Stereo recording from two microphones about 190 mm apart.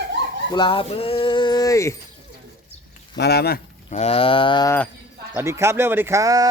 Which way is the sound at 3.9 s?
35° left (ahead or behind).